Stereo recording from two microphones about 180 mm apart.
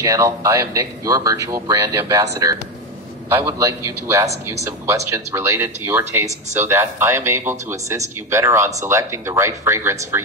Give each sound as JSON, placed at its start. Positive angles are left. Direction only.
{"t": 0.0, "sound": "speech", "side_deg": -15}
{"t": 3.3, "sound": "speech", "side_deg": -15}